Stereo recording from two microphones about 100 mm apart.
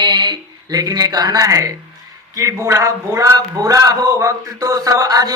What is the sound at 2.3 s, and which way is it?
Speech, 30° right (ahead or behind).